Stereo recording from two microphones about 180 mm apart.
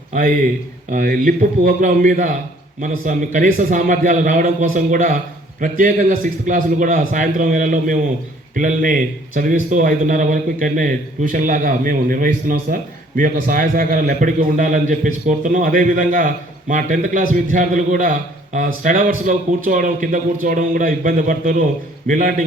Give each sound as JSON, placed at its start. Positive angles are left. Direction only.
{"t": 0.1, "sound": "a man's voice", "side_deg": -50}